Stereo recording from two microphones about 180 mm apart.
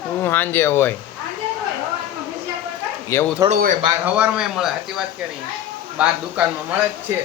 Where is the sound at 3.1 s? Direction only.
15° left (ahead or behind).